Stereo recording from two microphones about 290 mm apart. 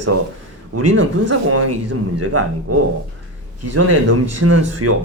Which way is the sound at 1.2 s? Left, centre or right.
Right.